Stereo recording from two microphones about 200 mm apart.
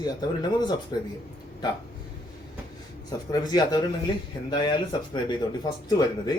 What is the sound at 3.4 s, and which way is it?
Speech, 20° left (ahead or behind).